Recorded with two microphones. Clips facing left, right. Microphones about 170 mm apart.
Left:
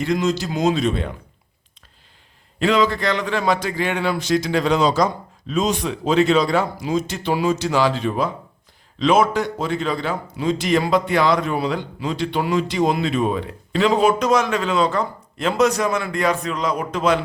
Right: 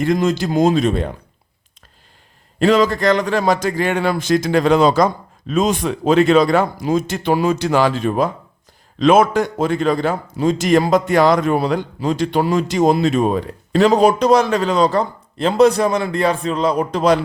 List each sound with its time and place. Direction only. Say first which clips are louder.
0.0 s a man's voice: right 4 dB; 50° right (ahead or behind)
2.6 s a man's voice: right 4 dB; 45° right (ahead or behind)